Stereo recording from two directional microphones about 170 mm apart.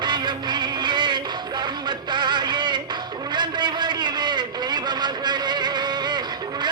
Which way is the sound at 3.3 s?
25° right (ahead or behind).